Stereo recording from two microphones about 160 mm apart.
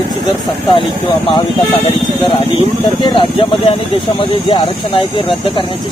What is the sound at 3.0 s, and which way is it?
Speech, 30° left (ahead or behind).